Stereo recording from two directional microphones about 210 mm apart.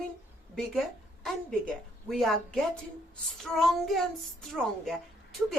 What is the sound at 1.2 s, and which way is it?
A woman's voice, 5° left (ahead or behind).